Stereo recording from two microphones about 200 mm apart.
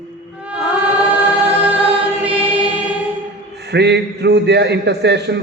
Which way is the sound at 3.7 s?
60° right (ahead or behind).